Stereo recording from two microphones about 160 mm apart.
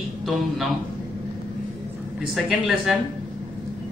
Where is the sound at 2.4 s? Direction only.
Centre (ahead or behind).